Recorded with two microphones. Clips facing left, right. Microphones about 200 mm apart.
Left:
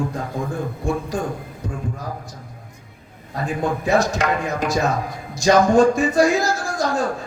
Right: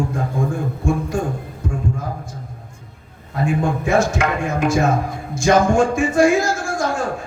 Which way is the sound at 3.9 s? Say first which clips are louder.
Right 1 dB; 35° left (ahead or behind).